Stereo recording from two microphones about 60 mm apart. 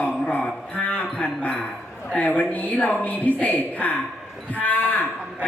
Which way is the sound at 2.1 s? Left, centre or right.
Left.